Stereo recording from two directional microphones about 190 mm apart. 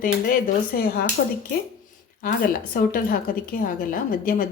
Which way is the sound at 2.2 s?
50° left (ahead or behind).